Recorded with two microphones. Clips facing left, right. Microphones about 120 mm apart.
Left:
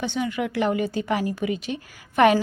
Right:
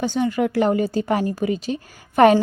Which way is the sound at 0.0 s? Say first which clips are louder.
Right 5 dB; 40° right (ahead or behind).